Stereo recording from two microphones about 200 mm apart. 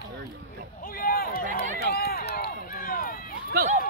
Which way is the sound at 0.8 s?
45° left (ahead or behind).